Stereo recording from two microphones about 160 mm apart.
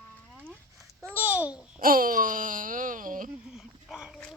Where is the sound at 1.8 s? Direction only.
60° right (ahead or behind).